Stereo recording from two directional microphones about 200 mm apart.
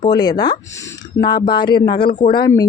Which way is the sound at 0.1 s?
20° left (ahead or behind).